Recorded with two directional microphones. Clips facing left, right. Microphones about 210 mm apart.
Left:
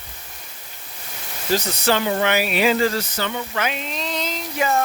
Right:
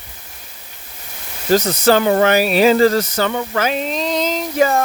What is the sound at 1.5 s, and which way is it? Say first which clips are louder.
Speech: right 7 dB; 45° right (ahead or behind).